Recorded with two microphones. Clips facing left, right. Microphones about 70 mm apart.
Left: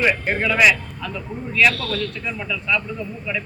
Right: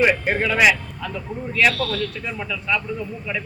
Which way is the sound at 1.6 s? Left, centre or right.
Centre.